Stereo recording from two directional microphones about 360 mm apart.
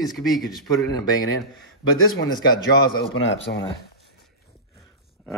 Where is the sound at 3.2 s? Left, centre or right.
Left.